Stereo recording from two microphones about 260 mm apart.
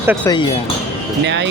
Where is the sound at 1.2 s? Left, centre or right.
Right.